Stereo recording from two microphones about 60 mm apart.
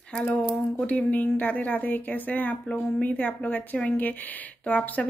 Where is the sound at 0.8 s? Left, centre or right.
Left.